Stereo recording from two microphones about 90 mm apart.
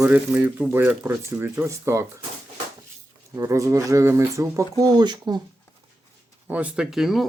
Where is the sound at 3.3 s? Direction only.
35° right (ahead or behind); by 5.4 s 50° right (ahead or behind).